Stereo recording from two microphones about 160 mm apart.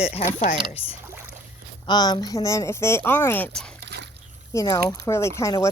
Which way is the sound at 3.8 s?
90° right.